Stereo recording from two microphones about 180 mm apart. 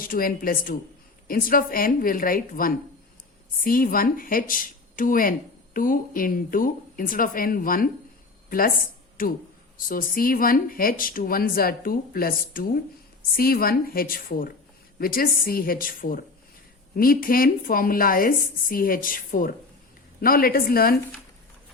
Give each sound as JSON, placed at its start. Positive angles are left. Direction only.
{"t": 0.0, "sound": "a woman's voice", "side_deg": 50}